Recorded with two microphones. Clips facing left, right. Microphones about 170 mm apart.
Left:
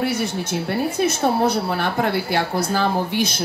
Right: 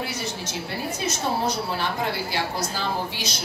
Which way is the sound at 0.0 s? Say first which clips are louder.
Left 8 dB; 55° left (ahead or behind).